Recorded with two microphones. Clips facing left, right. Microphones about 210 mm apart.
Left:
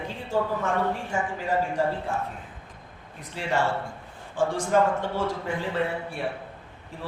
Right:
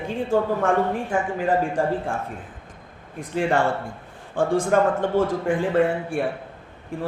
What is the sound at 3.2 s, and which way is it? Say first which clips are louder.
Speech: right 6 dB; 50° right (ahead or behind).